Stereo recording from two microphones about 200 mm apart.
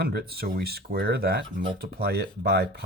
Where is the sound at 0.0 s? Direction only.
50° right (ahead or behind).